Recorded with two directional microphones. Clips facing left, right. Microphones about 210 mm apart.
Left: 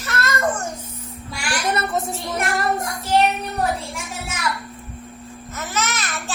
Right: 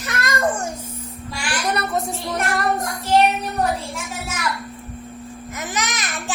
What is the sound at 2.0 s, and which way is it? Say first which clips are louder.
Speech: right 1 dB; 5° left (ahead or behind).